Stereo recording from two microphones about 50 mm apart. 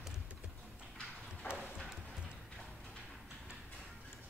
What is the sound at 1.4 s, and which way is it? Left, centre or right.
Clip-clop, right.